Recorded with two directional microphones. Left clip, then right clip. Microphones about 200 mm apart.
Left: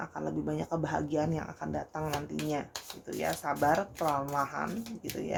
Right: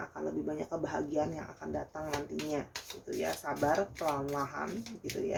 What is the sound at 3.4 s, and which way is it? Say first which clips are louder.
Speech: left 4 dB; 40° left (ahead or behind).